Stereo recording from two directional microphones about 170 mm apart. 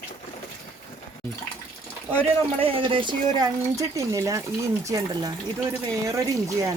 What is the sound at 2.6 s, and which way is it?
Speech, 30° right (ahead or behind).